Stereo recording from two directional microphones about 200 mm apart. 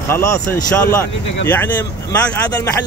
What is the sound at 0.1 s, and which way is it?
Speech, 15° left (ahead or behind).